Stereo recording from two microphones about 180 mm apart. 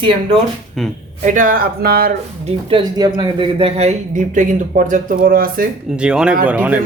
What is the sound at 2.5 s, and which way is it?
Speech, 25° right (ahead or behind).